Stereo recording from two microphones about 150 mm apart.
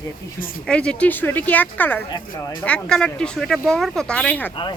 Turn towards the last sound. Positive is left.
turn(degrees=10)  # may be behind; listen again after turning